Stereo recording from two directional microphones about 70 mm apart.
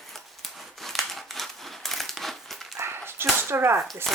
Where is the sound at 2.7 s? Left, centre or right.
Right.